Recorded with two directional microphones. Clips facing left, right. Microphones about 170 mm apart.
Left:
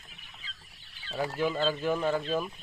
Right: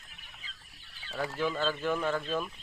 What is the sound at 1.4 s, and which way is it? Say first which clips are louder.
Speech: left 2 dB; 15° left (ahead or behind).